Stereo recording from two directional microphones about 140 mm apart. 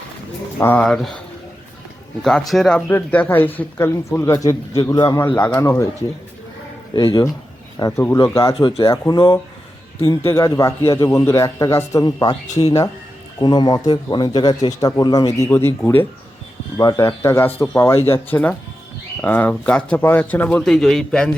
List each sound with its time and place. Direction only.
0.6 s speech: 10° left (ahead or behind)
2.5 s speech: 5° left (ahead or behind); by 5.2 s 25° left (ahead or behind)
5.2 s a man's voice: 15° left (ahead or behind)
6.9 s a man's voice: 30° left (ahead or behind)
8.5 s speech: 40° left (ahead or behind)
8.9 s a man's voice: 30° left (ahead or behind); by 21.2 s 5° left (ahead or behind)